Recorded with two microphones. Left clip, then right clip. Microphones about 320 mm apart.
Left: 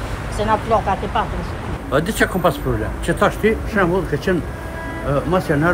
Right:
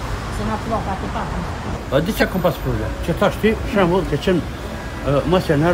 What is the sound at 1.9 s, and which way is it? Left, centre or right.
A man's voice, centre.